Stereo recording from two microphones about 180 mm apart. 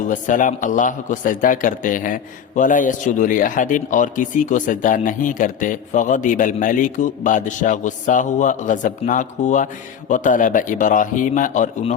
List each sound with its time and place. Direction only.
0.0 s a man's voice: 45° left (ahead or behind)